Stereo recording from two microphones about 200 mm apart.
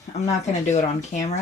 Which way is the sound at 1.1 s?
40° left (ahead or behind).